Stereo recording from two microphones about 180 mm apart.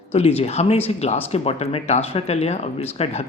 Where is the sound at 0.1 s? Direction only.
35° left (ahead or behind).